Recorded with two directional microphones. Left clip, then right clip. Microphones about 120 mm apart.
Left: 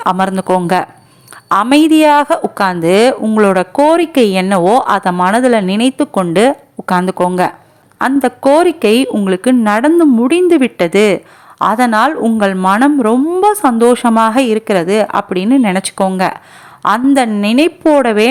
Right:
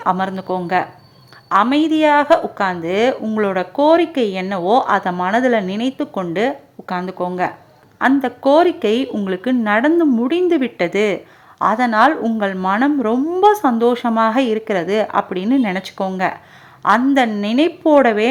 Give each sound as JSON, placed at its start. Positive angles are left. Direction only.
{"t": 0.0, "sound": "a woman's voice", "side_deg": 40}
{"t": 7.9, "sound": "speech", "side_deg": 35}